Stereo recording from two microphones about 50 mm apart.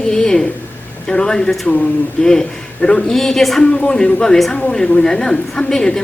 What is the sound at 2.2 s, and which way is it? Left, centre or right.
Speech, centre.